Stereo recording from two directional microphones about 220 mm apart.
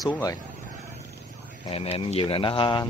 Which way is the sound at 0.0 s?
15° left (ahead or behind).